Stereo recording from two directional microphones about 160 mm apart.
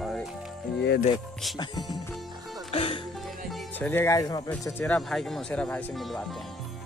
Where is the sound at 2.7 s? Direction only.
35° left (ahead or behind).